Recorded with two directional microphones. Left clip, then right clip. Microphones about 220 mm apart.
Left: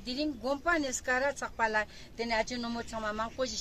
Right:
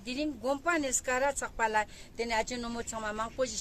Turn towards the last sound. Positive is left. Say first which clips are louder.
# right 1 dB
turn(degrees=-25)  # may be behind; listen again after turning